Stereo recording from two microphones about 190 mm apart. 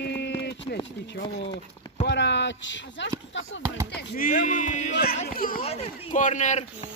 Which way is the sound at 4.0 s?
55° left (ahead or behind).